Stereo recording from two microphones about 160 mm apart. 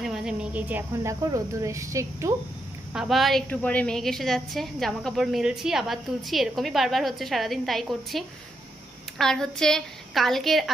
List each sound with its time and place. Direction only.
0.0 s speech: 5° right (ahead or behind)
1.2 s speech: 20° right (ahead or behind)
2.9 s a woman's voice: centre (ahead or behind)